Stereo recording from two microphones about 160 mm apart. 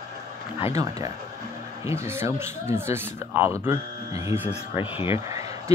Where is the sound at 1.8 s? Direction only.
15° right (ahead or behind).